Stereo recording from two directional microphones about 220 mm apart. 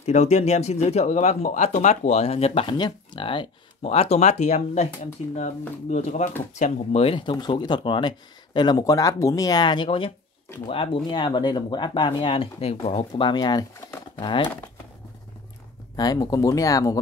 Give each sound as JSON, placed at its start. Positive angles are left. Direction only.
{"t": 0.0, "sound": "speech", "side_deg": 30}
{"t": 16.0, "sound": "speech", "side_deg": 15}